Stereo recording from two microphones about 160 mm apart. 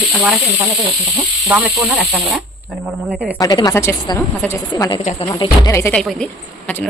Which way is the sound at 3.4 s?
20° left (ahead or behind).